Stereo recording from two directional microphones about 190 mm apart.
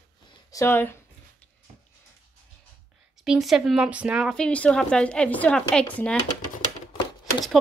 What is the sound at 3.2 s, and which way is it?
Speech, centre (ahead or behind).